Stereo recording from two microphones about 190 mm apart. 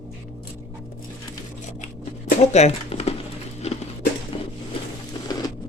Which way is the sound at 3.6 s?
35° left (ahead or behind).